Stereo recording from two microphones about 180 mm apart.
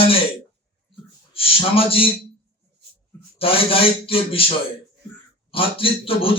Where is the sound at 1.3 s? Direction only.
30° left (ahead or behind).